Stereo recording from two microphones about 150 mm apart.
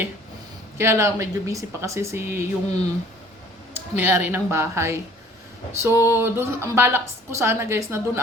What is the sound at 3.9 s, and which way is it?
A woman's voice, 15° right (ahead or behind).